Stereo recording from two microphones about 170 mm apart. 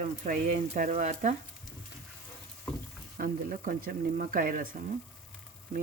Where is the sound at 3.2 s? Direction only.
55° right (ahead or behind).